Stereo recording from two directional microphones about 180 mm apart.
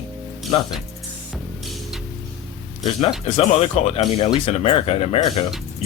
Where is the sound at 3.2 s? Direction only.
35° left (ahead or behind).